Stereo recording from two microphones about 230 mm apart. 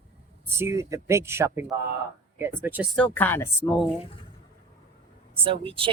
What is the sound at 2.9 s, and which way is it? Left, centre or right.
Speech, centre.